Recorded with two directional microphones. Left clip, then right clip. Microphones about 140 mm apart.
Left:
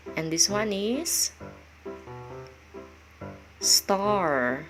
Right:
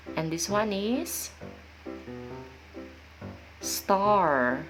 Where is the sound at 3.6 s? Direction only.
10° left (ahead or behind).